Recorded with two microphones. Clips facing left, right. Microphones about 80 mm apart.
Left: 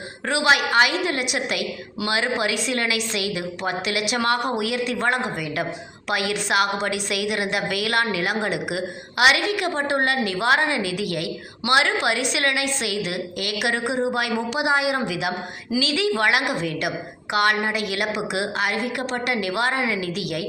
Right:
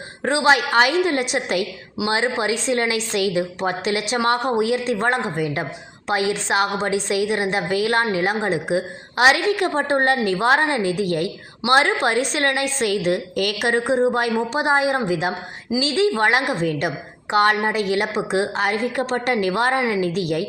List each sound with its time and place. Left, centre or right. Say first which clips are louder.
0.3 s a woman's voice: right 3 dB; right